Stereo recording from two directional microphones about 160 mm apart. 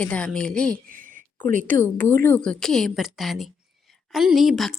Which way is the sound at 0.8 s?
55° right (ahead or behind).